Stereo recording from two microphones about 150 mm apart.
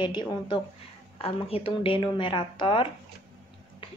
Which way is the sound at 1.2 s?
40° left (ahead or behind).